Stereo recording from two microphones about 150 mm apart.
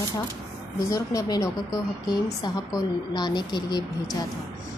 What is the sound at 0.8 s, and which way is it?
A woman's voice, 20° left (ahead or behind).